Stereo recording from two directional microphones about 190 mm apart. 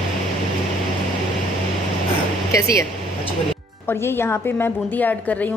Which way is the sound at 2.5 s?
15° left (ahead or behind).